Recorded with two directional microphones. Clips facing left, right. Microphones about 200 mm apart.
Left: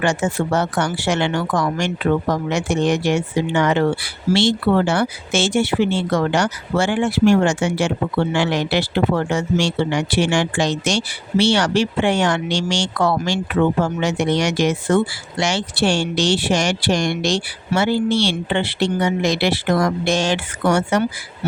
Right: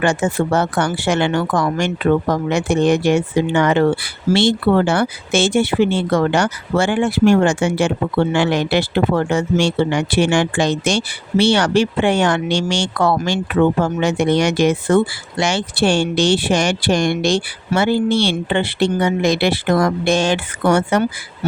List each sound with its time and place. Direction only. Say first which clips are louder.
0.0 s speech: right 2 dB; 55° right (ahead or behind)